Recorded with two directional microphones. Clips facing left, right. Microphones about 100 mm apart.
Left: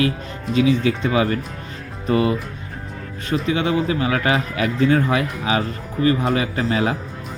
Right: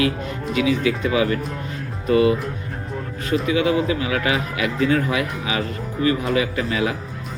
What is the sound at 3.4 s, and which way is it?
Speech, 30° left (ahead or behind).